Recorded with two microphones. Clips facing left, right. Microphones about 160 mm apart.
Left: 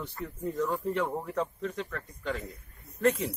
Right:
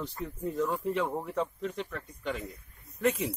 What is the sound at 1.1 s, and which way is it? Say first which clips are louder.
Speech: even; 5° right (ahead or behind).